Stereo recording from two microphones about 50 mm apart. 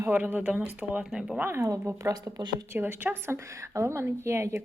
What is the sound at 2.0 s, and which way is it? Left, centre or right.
Speech, right.